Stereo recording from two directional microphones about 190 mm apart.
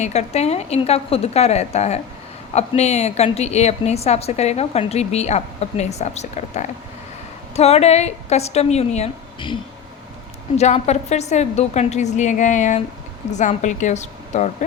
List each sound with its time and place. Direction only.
0.0 s a woman's voice: 35° left (ahead or behind)
10.6 s a woman's voice: 35° left (ahead or behind)